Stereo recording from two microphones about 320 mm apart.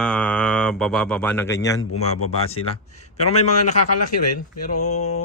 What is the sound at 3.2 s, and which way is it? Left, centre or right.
Speech, centre.